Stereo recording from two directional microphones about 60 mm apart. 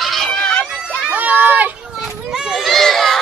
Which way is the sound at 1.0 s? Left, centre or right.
Right.